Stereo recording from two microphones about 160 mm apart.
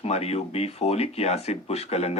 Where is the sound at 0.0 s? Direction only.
40° left (ahead or behind).